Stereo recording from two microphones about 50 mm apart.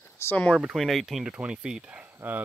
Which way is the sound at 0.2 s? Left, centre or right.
Left.